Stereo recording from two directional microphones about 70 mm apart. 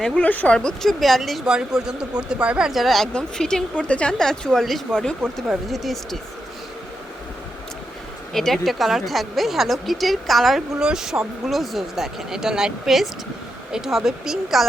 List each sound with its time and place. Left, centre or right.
0.2 s speech: left
0.5 s a woman's voice: centre
5.6 s a woman's voice: centre
8.3 s a woman's voice: centre